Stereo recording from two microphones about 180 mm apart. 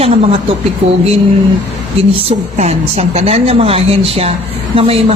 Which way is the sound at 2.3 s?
35° right (ahead or behind).